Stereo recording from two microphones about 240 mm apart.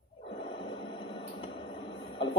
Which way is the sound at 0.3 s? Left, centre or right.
Left.